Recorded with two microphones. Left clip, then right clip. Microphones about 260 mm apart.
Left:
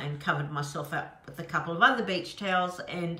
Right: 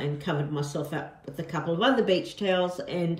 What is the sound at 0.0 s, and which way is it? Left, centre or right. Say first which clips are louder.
A woman's voice: even; centre.